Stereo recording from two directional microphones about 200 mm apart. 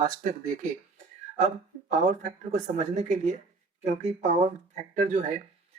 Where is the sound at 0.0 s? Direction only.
40° right (ahead or behind).